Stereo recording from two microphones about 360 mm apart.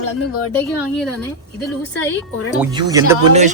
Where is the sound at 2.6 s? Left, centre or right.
Centre.